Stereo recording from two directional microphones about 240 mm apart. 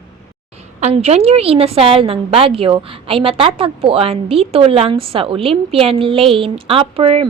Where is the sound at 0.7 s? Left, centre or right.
Right.